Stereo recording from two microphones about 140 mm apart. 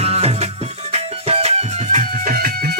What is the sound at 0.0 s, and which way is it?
Music, 45° right (ahead or behind).